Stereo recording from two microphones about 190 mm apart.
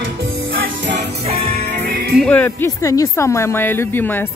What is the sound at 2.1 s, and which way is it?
Speech, 5° left (ahead or behind).